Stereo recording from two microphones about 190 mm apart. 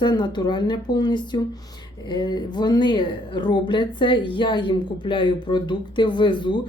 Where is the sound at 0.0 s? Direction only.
20° left (ahead or behind).